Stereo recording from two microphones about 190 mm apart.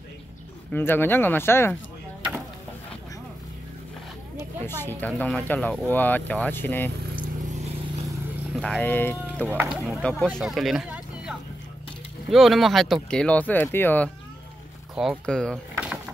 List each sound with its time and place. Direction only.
0.7 s speech: 10° left (ahead or behind)
4.6 s speech: 10° left (ahead or behind)
8.5 s speech: 5° left (ahead or behind)
9.5 s speech: 5° right (ahead or behind)
10.0 s speech: 5° left (ahead or behind)
15.7 s a sound: 5° right (ahead or behind)